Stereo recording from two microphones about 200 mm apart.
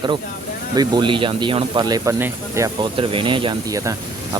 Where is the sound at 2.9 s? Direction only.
25° right (ahead or behind).